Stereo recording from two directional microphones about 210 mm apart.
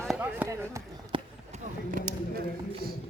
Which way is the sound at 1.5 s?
40° right (ahead or behind).